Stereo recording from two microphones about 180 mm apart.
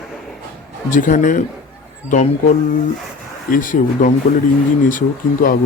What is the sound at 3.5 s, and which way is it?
Speech, 50° left (ahead or behind).